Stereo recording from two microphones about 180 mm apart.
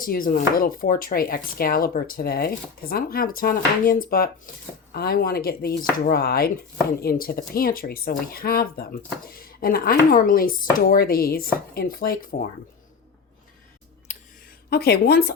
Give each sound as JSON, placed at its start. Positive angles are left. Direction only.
{"t": 0.0, "sound": "speech", "side_deg": 50}
{"t": 14.1, "sound": "a sound", "side_deg": 40}
{"t": 14.7, "sound": "speech", "side_deg": 60}